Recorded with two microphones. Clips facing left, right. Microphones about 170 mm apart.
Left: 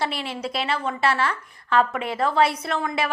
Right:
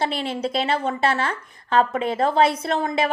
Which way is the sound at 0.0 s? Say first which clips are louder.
Right 3 dB; 25° right (ahead or behind).